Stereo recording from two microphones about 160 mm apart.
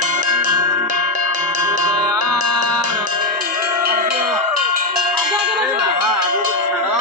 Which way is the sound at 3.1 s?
60° right (ahead or behind).